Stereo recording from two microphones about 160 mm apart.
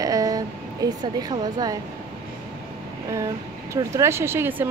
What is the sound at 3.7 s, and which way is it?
Speech, 20° right (ahead or behind).